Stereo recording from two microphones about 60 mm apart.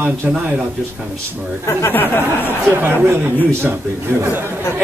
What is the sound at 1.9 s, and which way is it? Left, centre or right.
Speech, left.